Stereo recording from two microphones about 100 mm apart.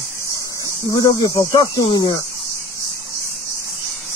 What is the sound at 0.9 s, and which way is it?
Speech, 35° left (ahead or behind).